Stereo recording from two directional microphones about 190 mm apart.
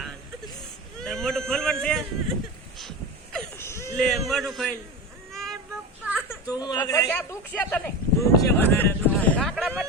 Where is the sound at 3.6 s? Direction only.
15° left (ahead or behind).